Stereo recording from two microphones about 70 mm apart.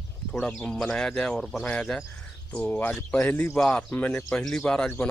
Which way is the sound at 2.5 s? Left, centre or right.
Left.